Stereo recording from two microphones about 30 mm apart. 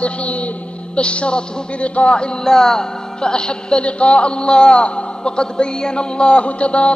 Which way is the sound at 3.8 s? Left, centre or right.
Left.